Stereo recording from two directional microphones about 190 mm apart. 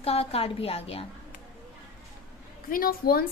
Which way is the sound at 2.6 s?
50° left (ahead or behind).